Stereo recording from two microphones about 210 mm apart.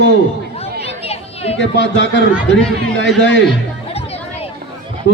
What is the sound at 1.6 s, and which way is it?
A man's voice, 60° left (ahead or behind).